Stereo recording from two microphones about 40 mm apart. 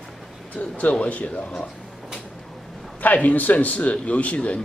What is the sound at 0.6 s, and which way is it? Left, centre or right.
Speech, left.